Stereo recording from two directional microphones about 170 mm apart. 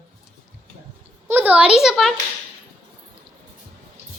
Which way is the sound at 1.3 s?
10° right (ahead or behind).